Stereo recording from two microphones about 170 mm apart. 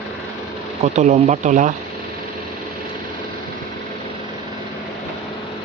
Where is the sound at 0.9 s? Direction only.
40° right (ahead or behind).